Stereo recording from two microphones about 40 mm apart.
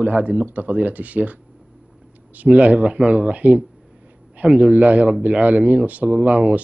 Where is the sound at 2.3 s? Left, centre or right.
Right.